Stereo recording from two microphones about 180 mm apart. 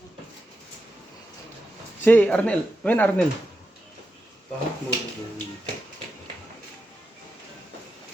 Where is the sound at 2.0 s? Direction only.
10° left (ahead or behind).